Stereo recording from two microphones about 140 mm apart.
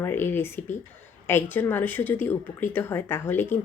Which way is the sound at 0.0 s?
15° left (ahead or behind).